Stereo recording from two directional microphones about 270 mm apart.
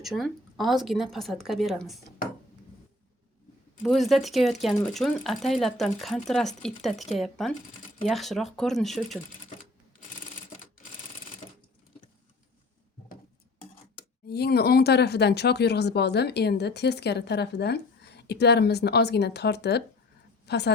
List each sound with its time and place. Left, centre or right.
0.0 s speech: centre
3.8 s speech: centre
14.3 s speech: left